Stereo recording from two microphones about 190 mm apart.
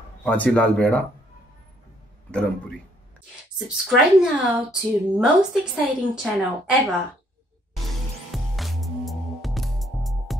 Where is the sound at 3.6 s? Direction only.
Centre (ahead or behind).